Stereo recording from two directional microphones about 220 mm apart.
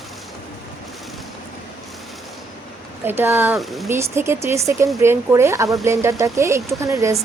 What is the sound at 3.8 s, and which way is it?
A woman's voice, 10° right (ahead or behind).